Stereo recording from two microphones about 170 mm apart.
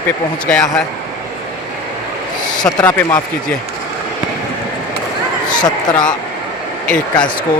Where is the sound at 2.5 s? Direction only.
25° left (ahead or behind).